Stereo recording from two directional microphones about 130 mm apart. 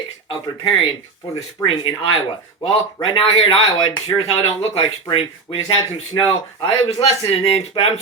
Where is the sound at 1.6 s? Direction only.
45° left (ahead or behind).